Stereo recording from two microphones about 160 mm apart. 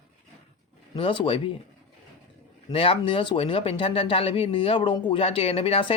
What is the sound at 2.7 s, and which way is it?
Speech, 35° left (ahead or behind).